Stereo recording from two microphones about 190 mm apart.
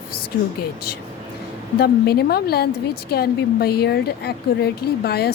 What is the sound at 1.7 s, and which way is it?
A woman's voice, 55° left (ahead or behind).